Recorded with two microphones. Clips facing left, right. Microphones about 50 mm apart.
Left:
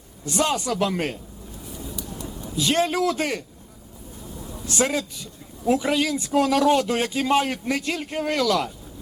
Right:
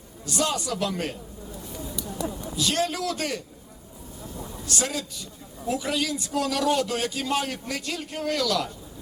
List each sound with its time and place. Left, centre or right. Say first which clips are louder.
0.3 s speech: left 4 dB; left
2.2 s a sound: right 11 dB; right
2.6 s speech: left 5 dB; left
4.6 s speech: left 6 dB; left